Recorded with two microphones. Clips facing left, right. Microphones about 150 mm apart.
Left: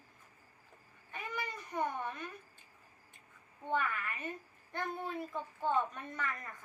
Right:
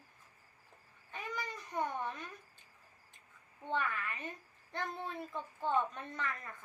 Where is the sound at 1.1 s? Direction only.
10° left (ahead or behind).